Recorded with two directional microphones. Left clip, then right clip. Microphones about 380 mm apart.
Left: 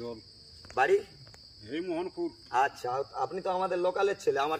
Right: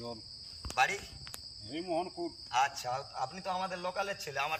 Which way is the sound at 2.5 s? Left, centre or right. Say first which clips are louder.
Left 3 dB; centre.